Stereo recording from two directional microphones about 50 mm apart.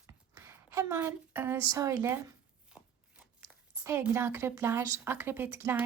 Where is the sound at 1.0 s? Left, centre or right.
Right.